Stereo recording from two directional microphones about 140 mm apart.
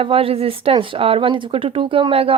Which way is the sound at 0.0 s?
40° right (ahead or behind).